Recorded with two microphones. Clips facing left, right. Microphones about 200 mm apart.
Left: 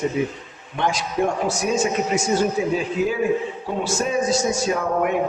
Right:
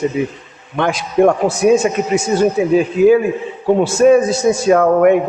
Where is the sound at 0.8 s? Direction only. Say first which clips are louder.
Right 9 dB; 60° right (ahead or behind).